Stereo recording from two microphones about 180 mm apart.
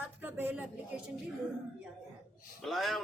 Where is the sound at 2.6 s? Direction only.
Centre (ahead or behind).